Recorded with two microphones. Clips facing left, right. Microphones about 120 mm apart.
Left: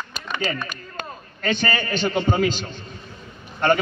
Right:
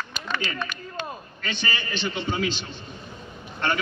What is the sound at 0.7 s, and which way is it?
A man's voice, 45° left (ahead or behind).